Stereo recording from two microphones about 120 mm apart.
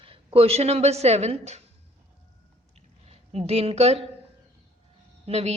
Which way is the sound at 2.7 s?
60° right (ahead or behind).